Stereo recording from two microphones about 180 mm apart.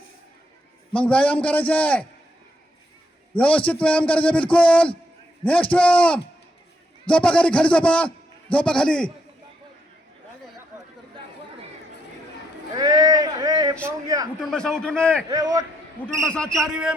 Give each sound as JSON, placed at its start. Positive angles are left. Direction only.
{"t": 0.9, "sound": "a man's voice", "side_deg": 5}
{"t": 3.3, "sound": "a man's voice", "side_deg": 10}
{"t": 12.7, "sound": "a sound", "side_deg": -20}
{"t": 14.4, "sound": "a man's voice", "side_deg": 5}
{"t": 15.3, "sound": "a man's voice", "side_deg": -20}
{"t": 16.0, "sound": "a man's voice", "side_deg": 5}